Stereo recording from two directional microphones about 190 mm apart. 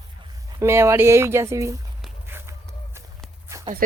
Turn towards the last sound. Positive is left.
turn(degrees=-45)  # may be behind; listen again after turning